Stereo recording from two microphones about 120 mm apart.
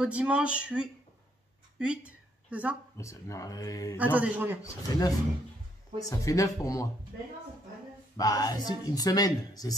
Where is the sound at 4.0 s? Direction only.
15° right (ahead or behind).